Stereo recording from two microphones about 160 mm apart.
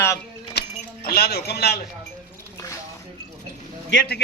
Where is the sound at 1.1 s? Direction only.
80° left.